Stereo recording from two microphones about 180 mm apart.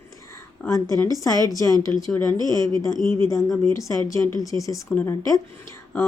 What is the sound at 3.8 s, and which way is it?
Speech, 20° left (ahead or behind).